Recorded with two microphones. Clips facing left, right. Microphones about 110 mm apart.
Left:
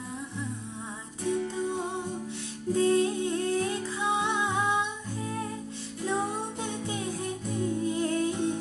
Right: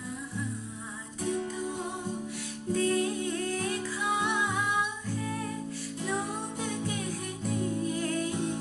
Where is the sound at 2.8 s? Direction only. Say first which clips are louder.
Left 4 dB; 25° left (ahead or behind).